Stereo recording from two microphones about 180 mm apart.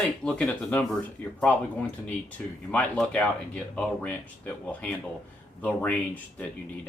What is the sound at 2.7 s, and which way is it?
Speech, 10° left (ahead or behind).